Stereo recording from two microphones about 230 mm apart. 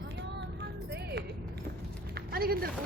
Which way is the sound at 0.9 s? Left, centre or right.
Right.